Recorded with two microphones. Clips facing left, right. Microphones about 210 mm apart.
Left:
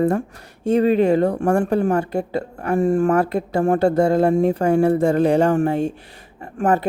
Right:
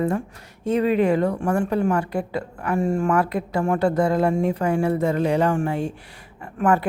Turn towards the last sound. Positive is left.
turn(degrees=40)  # may be behind; listen again after turning